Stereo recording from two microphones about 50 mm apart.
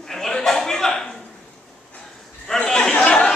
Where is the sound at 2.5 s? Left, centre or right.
Left.